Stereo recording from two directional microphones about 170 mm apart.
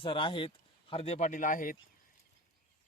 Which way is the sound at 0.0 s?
30° left (ahead or behind).